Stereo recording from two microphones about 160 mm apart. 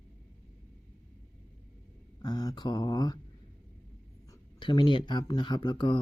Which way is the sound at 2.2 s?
25° left (ahead or behind).